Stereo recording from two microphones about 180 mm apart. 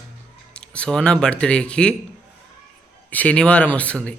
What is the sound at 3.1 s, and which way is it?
Speech, 5° left (ahead or behind).